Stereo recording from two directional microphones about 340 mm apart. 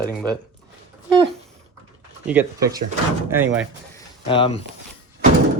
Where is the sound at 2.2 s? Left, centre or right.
Centre.